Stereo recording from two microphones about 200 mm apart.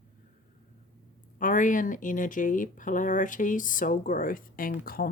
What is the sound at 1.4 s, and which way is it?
Speech, 40° left (ahead or behind).